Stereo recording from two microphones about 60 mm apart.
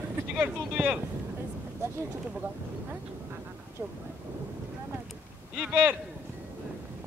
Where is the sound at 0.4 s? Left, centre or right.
Right.